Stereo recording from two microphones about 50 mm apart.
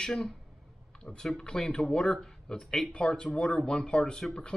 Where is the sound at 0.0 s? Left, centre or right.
Centre.